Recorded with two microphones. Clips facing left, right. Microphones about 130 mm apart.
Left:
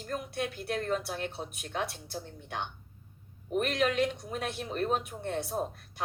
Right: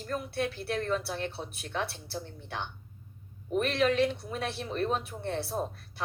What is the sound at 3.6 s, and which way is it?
Speech, 35° right (ahead or behind).